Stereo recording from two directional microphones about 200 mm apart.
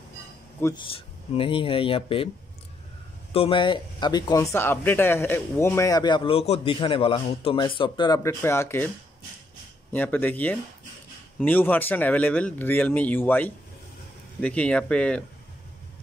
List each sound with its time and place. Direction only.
0.6 s speech: 10° left (ahead or behind)
0.9 s speech: 25° left (ahead or behind)
3.3 s speech: 25° left (ahead or behind)
9.9 s speech: 10° left (ahead or behind)